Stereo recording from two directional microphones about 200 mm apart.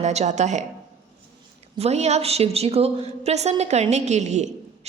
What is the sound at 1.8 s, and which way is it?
A woman's voice, 30° right (ahead or behind).